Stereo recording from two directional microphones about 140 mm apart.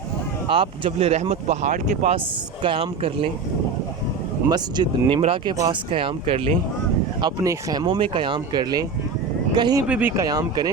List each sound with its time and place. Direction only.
0.4 s speech: 40° right (ahead or behind)
1.7 s speech: 65° right (ahead or behind)
2.6 s speech: 40° right (ahead or behind)
4.4 s speech: 30° right (ahead or behind)
5.9 s speech: 40° right (ahead or behind)
7.2 s speech: 30° right (ahead or behind)
9.8 s speech: 10° right (ahead or behind)
10.2 s speech: 25° right (ahead or behind)